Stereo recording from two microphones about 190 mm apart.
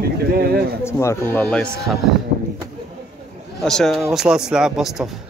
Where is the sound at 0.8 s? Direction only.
15° left (ahead or behind).